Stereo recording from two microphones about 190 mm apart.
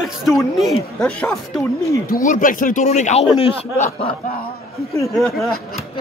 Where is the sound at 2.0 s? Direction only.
45° left (ahead or behind).